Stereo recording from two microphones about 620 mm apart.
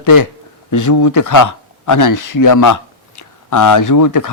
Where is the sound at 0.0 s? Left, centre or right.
Left.